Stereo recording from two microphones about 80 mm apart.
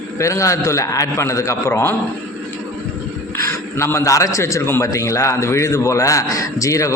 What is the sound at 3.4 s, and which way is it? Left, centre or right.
A man's voice, left.